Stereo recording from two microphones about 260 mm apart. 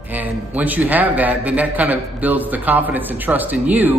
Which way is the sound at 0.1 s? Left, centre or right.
Centre.